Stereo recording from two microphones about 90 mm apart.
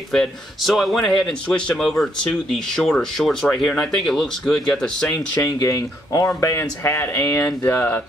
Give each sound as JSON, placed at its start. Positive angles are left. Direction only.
{"t": 0.1, "sound": "speech", "side_deg": 0}
{"t": 5.6, "sound": "speech", "side_deg": 35}